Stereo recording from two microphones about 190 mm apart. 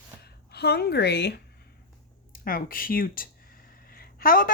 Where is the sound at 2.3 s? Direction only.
50° left (ahead or behind).